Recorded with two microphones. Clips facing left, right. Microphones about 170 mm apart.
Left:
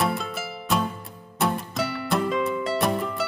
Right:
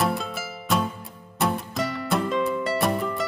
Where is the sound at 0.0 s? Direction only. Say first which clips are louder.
Even; centre (ahead or behind).